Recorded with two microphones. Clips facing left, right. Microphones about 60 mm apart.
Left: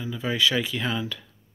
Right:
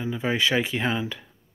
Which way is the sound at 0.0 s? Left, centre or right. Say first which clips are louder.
Right 1 dB; right.